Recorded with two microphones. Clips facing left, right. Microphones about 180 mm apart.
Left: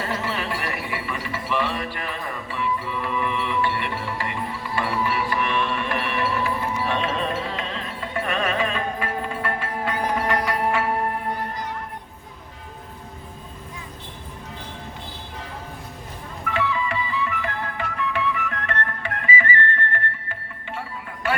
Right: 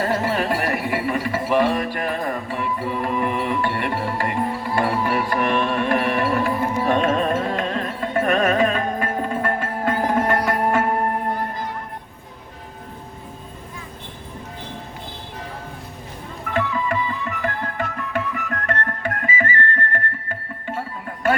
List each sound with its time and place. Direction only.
0.0 s music: 45° right (ahead or behind)
16.5 s music: 45° right (ahead or behind)